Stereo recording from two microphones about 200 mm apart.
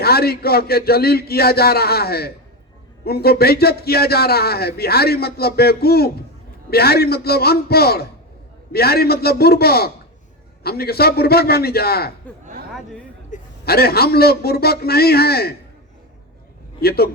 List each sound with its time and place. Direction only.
0.0 s a man's voice: 50° left (ahead or behind)
13.3 s a man's voice: 50° left (ahead or behind)
16.8 s a man's voice: 50° left (ahead or behind)